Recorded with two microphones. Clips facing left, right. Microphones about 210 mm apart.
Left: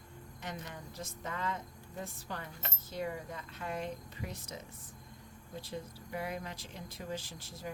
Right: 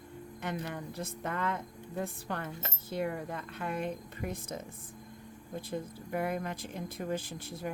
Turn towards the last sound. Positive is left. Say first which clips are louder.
# right 6 dB
turn(degrees=-55)  # may be behind; listen again after turning